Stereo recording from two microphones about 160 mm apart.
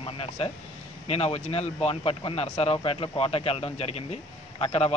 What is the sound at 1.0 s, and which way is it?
Speech, 40° left (ahead or behind).